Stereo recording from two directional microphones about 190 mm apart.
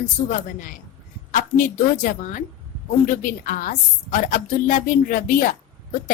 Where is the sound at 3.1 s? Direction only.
45° left (ahead or behind).